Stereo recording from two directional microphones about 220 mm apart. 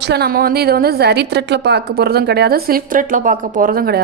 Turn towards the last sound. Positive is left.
turn(degrees=-40)  # may be behind; listen again after turning